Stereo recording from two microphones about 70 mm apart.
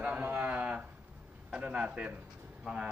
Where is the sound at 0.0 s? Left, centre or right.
Right.